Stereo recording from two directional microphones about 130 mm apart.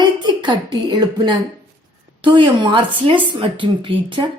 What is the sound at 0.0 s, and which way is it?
Speech, 35° right (ahead or behind).